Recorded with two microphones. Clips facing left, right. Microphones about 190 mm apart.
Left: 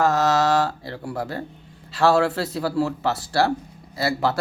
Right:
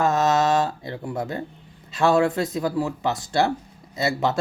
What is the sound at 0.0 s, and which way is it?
Mantra, 20° right (ahead or behind).